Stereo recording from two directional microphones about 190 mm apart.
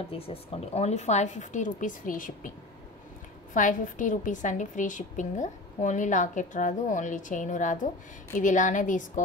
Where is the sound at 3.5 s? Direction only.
40° left (ahead or behind).